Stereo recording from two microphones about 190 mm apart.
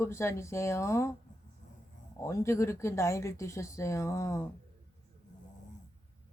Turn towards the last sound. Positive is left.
turn(degrees=15)  # may be behind; listen again after turning